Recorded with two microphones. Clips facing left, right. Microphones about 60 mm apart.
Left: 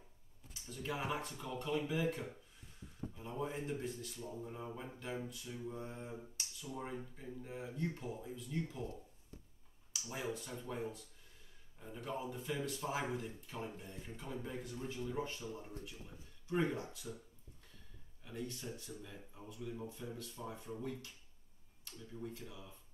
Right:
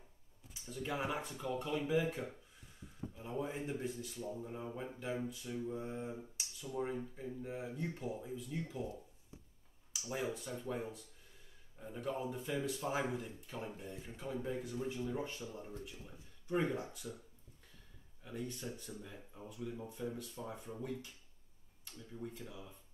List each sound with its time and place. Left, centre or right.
0.5 s speech: centre
1.4 s mantra: centre
3.2 s mantra: centre
8.7 s a sound: centre
10.0 s speech: centre
13.1 s mantra: centre
15.1 s speech: centre
18.2 s speech: centre
22.5 s mantra: centre